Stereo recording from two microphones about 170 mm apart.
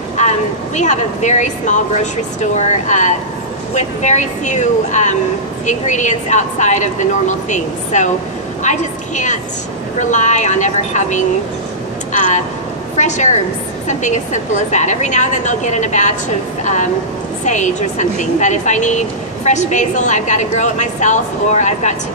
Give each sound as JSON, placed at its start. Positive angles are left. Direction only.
{"t": 0.7, "sound": "a woman's voice", "side_deg": 45}
{"t": 12.9, "sound": "a woman's voice", "side_deg": 45}